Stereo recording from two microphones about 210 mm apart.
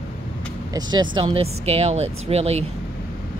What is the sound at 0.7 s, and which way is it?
Speech, 20° right (ahead or behind).